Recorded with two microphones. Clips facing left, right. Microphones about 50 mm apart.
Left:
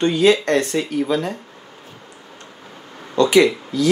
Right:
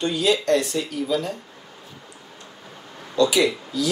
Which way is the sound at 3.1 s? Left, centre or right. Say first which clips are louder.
Left 5 dB; left.